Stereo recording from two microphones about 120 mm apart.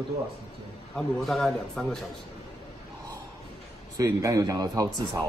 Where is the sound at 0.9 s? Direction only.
5° left (ahead or behind).